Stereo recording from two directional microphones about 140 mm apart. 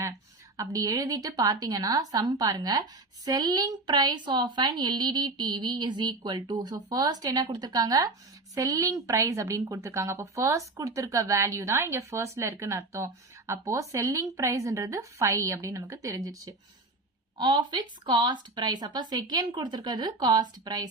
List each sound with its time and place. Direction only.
0.5 s a woman's voice: 25° right (ahead or behind)